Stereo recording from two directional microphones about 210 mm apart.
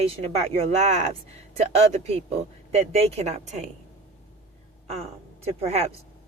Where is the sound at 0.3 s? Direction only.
30° right (ahead or behind).